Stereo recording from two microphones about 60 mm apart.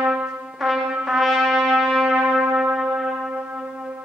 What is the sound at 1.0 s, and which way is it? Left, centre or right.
Trumpet, centre.